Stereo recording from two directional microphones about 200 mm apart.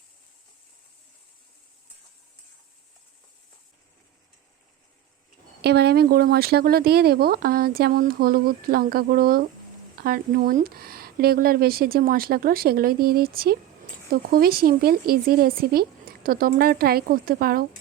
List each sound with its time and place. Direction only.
5.6 s speech: 55° right (ahead or behind)